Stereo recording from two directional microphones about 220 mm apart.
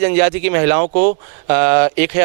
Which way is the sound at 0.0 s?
15° right (ahead or behind).